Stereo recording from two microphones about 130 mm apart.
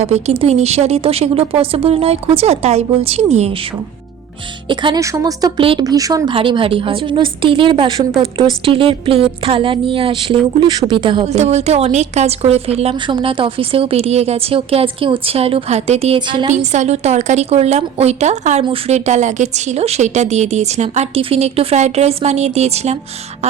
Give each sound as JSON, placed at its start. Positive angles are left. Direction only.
{"t": 0.0, "sound": "a woman's voice", "side_deg": -55}
{"t": 4.7, "sound": "a woman's voice", "side_deg": -40}
{"t": 4.9, "sound": "speech", "side_deg": -25}
{"t": 5.5, "sound": "a woman's voice", "side_deg": -40}
{"t": 5.8, "sound": "speech", "side_deg": -30}
{"t": 6.3, "sound": "a woman's voice", "side_deg": -40}
{"t": 11.3, "sound": "speech", "side_deg": -55}
{"t": 13.1, "sound": "a woman's voice", "side_deg": -40}
{"t": 16.1, "sound": "a woman's voice", "side_deg": -40}
{"t": 16.5, "sound": "speech", "side_deg": -65}